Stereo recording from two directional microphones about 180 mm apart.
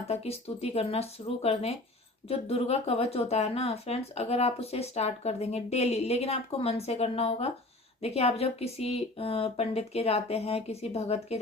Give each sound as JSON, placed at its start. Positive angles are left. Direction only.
{"t": 0.1, "sound": "speech", "side_deg": 35}